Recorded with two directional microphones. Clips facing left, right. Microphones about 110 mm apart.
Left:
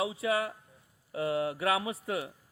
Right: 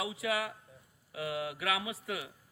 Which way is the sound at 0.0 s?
30° left (ahead or behind).